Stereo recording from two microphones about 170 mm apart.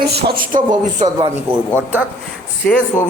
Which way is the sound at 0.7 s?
45° right (ahead or behind).